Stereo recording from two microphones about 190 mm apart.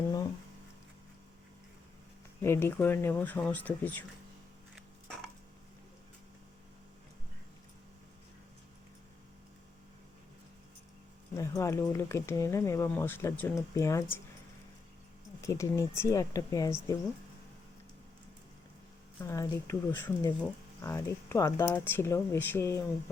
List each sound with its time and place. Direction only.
2.4 s speech: 15° left (ahead or behind)
4.7 s a sound: centre (ahead or behind)
11.3 s speech: 15° left (ahead or behind)
15.4 s speech: 15° left (ahead or behind)
19.2 s speech: 15° left (ahead or behind)